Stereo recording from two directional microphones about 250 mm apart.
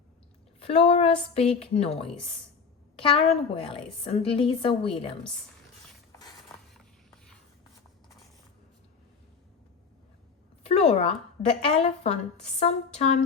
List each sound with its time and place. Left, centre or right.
0.6 s a woman's voice: left
6.1 s a sound: centre
10.7 s a woman's voice: left